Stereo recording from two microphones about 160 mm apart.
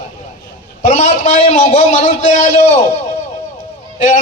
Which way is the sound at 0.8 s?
50° left (ahead or behind).